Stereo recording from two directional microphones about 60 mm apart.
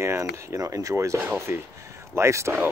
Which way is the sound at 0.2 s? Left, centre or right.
Right.